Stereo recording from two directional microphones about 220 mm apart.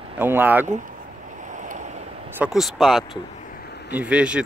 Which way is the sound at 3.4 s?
40° left (ahead or behind).